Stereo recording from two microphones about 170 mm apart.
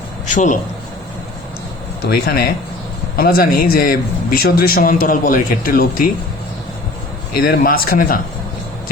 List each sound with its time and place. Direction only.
0.3 s a man's voice: 50° left (ahead or behind)
2.0 s a man's voice: 60° left (ahead or behind)
7.3 s a man's voice: 60° left (ahead or behind)